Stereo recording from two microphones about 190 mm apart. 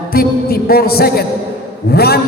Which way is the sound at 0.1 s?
55° left (ahead or behind).